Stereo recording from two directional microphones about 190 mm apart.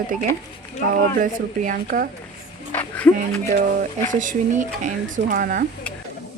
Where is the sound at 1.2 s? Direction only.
45° right (ahead or behind).